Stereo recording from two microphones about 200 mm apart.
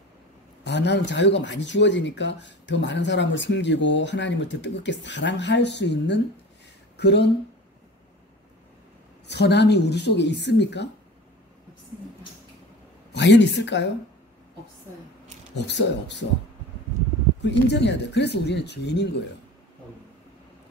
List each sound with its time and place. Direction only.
0.7 s speech: 60° left (ahead or behind)
9.3 s speech: 55° left (ahead or behind)
13.1 s a woman's voice: 60° left (ahead or behind)
15.5 s speech: 60° left (ahead or behind)
17.4 s speech: 60° left (ahead or behind)